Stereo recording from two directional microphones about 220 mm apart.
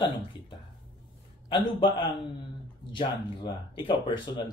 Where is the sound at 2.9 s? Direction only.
20° left (ahead or behind).